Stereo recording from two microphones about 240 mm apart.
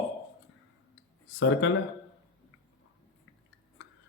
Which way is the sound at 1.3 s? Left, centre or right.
Left.